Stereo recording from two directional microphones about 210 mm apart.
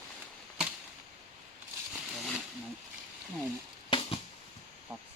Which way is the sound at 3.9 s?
25° left (ahead or behind).